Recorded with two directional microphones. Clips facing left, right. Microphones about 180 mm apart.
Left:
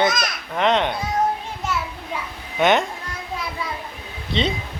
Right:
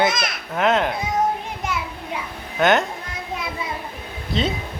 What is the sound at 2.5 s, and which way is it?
Speech, centre (ahead or behind).